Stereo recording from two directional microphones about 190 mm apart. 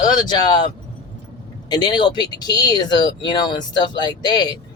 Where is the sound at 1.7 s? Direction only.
25° left (ahead or behind).